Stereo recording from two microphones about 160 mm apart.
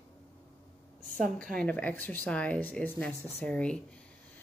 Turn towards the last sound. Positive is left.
turn(degrees=5)  # may be behind; listen again after turning